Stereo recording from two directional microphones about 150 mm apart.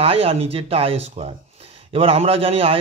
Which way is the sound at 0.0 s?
40° right (ahead or behind).